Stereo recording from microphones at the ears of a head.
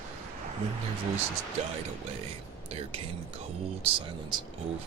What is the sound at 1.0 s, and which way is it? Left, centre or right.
Speech, right.